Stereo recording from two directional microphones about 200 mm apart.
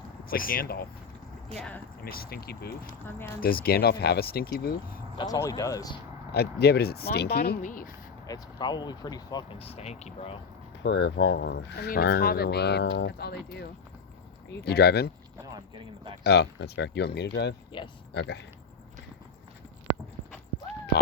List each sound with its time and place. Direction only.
0.3 s speech: 45° left (ahead or behind)
1.5 s speech: 5° left (ahead or behind)
2.0 s speech: 50° left (ahead or behind)
5.1 s speech: 20° left (ahead or behind)
6.3 s speech: 55° left (ahead or behind)
8.3 s speech: 20° left (ahead or behind)
10.8 s speech: 60° left (ahead or behind)
16.2 s speech: 55° left (ahead or behind)
17.7 s speech: 25° left (ahead or behind)
18.1 s speech: 55° left (ahead or behind)